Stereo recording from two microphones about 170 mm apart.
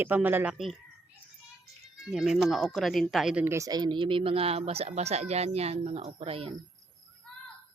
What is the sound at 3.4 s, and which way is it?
Speech, 15° right (ahead or behind).